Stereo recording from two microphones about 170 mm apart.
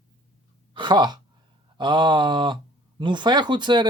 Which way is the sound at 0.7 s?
25° right (ahead or behind).